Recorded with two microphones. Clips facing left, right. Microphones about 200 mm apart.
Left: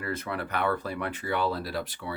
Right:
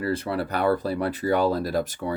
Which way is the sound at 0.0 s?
30° right (ahead or behind).